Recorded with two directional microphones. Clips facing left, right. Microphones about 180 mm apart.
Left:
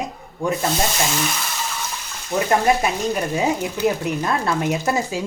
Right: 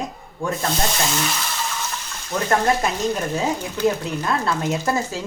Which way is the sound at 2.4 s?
10° left (ahead or behind).